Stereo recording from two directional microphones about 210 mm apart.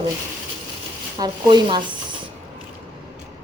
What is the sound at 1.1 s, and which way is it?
Speech, 20° right (ahead or behind).